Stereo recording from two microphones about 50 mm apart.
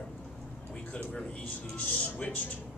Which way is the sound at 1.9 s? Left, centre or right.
Left.